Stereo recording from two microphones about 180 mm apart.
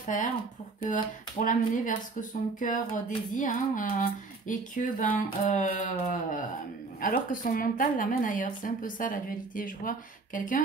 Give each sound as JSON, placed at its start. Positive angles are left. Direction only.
{"t": 0.0, "sound": "speech", "side_deg": 45}
{"t": 1.4, "sound": "speech", "side_deg": 45}